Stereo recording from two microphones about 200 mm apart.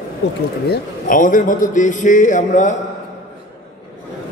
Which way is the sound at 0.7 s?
40° left (ahead or behind).